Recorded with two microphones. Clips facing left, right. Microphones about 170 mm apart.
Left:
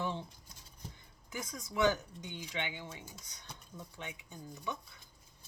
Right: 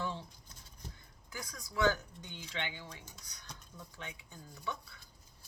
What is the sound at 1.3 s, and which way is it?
Speech, 20° left (ahead or behind).